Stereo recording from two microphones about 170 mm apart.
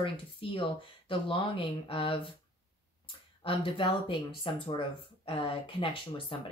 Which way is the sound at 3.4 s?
30° left (ahead or behind).